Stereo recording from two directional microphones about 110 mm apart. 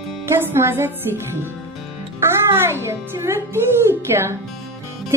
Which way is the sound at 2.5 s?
20° right (ahead or behind).